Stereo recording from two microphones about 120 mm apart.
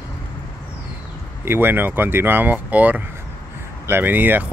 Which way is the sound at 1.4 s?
20° right (ahead or behind).